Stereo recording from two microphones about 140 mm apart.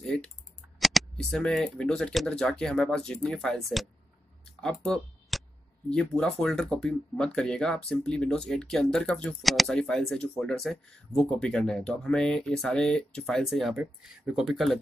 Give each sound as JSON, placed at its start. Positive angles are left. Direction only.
{"t": 0.7, "sound": "speech", "side_deg": 0}
{"t": 4.6, "sound": "a sound", "side_deg": 5}
{"t": 5.9, "sound": "speech", "side_deg": 5}